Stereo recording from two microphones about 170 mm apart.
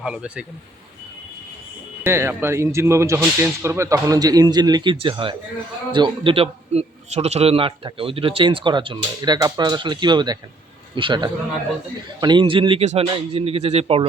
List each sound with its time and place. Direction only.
0.0 s a man's voice: 5° right (ahead or behind)
2.0 s a man's voice: 15° right (ahead or behind); by 14.1 s 35° right (ahead or behind)